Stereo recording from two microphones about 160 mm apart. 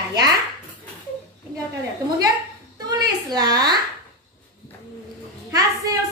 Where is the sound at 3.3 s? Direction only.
25° right (ahead or behind).